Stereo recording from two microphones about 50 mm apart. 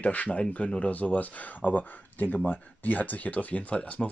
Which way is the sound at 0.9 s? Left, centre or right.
Left.